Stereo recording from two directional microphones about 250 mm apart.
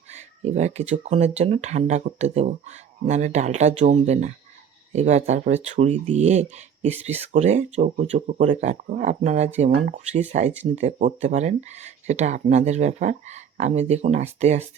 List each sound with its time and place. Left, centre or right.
0.1 s speech: right